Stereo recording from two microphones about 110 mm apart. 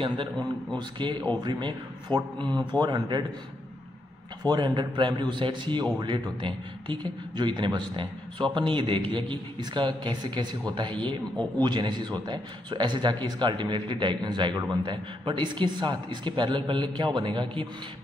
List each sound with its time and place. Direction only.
0.0 s a man's voice: 50° right (ahead or behind)
4.5 s a man's voice: 40° right (ahead or behind)